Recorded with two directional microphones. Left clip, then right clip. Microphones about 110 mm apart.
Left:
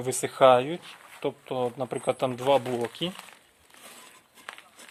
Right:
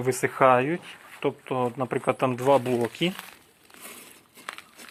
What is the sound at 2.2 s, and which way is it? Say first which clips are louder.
Speech: right 3 dB; 40° left (ahead or behind).